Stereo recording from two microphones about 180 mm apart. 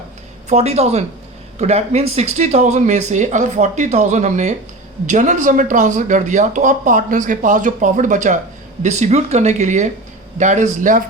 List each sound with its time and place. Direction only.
0.4 s speech: 35° right (ahead or behind)